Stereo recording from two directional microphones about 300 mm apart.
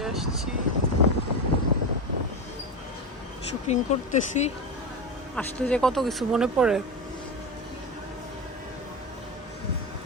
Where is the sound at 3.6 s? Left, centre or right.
Left.